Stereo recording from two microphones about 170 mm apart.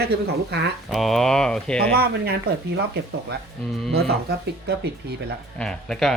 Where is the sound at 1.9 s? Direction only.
65° right (ahead or behind).